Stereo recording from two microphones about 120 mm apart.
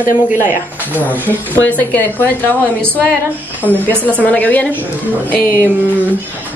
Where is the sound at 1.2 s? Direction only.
15° left (ahead or behind).